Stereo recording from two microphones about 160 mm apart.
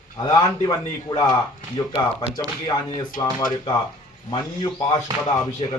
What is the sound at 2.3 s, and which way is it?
A man's voice, 25° left (ahead or behind).